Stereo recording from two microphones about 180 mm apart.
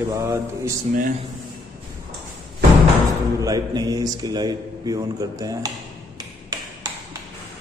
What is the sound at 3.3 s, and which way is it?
A man's voice, 20° right (ahead or behind).